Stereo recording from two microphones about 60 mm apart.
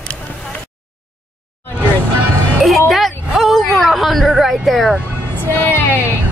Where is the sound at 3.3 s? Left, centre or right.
Centre.